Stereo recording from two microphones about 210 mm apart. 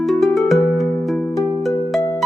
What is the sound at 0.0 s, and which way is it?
Music, centre (ahead or behind).